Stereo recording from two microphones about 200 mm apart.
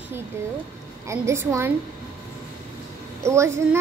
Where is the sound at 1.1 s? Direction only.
15° right (ahead or behind).